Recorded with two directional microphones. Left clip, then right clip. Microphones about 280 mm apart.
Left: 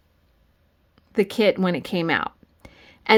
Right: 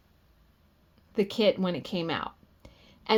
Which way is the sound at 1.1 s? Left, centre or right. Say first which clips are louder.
Left 5 dB; left.